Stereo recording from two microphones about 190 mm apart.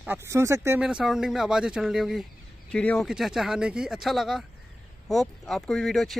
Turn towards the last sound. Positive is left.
turn(degrees=0)  # may be behind; listen again after turning